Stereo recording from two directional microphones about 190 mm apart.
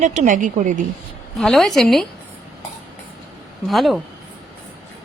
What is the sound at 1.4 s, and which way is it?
Speech, centre (ahead or behind).